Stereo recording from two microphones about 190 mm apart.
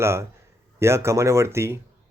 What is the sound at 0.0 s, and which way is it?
Speech, 15° right (ahead or behind).